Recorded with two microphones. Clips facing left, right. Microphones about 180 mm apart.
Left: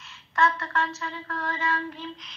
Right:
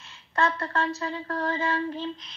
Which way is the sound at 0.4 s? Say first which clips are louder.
Left 1 dB; 30° right (ahead or behind).